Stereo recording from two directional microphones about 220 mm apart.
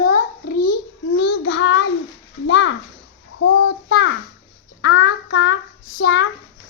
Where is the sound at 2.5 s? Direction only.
55° left (ahead or behind).